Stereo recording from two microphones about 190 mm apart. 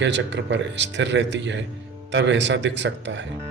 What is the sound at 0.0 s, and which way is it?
A man's voice, 70° right (ahead or behind).